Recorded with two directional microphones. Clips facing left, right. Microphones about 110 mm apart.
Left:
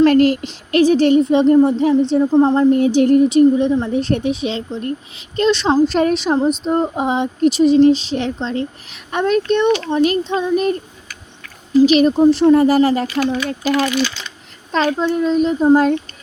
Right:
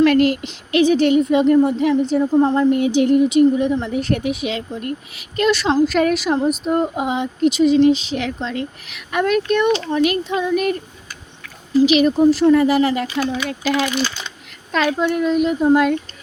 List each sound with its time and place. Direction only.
0.0 s speech: 40° left (ahead or behind); by 2.6 s 20° left (ahead or behind)
2.7 s speech: 40° left (ahead or behind)
11.9 s speech: 40° left (ahead or behind)
12.1 s speech: 25° left (ahead or behind)
12.5 s speech: 40° left (ahead or behind)
14.7 s speech: 30° left (ahead or behind)